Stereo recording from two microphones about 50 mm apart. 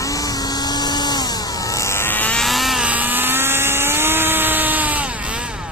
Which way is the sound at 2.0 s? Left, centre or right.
Left.